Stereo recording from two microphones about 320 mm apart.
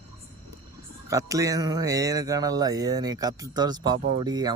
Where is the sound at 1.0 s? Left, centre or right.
Centre.